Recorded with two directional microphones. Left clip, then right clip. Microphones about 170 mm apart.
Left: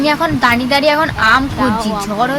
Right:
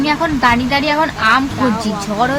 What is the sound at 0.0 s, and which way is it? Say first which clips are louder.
A woman's voice: left 1 dB; 25° left (ahead or behind).